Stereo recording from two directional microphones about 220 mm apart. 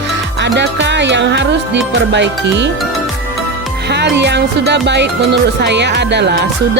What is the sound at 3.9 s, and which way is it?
Speech, 50° right (ahead or behind).